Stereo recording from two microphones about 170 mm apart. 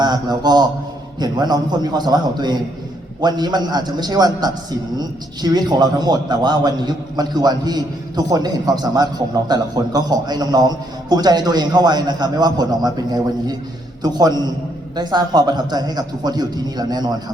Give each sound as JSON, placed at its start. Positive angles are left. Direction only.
{"t": 0.0, "sound": "a man's voice", "side_deg": -25}